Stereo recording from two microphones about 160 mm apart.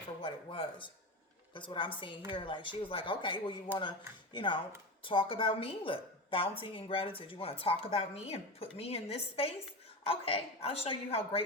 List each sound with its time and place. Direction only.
0.2 s a woman's voice: 35° left (ahead or behind)